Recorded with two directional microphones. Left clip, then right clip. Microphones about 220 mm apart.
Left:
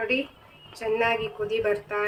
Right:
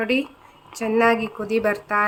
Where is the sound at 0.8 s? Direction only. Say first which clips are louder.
Right 6 dB; 50° right (ahead or behind).